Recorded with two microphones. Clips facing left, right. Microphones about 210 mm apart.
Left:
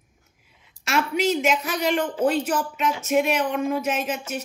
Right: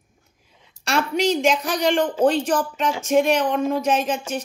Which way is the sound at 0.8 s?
25° right (ahead or behind).